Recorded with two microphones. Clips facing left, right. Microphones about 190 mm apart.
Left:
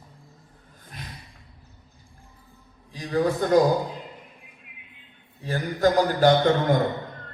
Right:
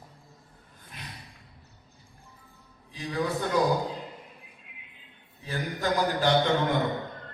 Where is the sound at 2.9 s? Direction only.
40° left (ahead or behind).